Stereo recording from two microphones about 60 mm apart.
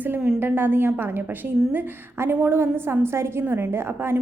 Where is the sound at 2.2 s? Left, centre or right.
Right.